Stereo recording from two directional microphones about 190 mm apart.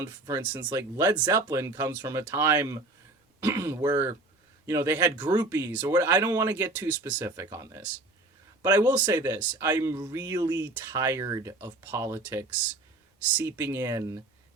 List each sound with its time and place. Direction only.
0.0 s speech: 15° right (ahead or behind)
6.1 s speech: 20° right (ahead or behind)